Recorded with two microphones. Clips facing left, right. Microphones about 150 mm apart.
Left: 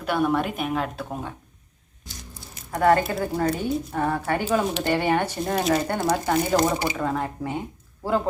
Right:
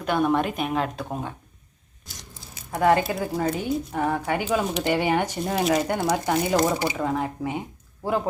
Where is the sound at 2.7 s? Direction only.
10° right (ahead or behind).